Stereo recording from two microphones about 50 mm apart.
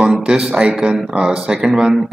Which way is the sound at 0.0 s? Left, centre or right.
Centre.